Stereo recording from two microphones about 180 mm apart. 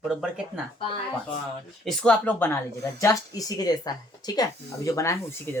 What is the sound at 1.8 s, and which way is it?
Speech, 5° left (ahead or behind).